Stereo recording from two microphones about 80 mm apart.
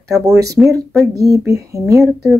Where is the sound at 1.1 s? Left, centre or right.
Right.